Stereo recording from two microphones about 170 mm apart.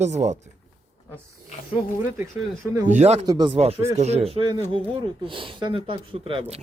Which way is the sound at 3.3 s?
25° right (ahead or behind).